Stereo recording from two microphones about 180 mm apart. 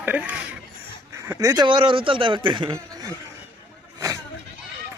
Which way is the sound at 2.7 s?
20° right (ahead or behind).